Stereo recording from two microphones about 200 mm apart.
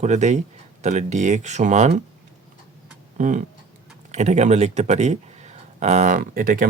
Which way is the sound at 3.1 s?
40° right (ahead or behind).